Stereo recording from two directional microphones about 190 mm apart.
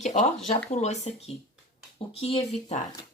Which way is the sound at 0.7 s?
35° left (ahead or behind).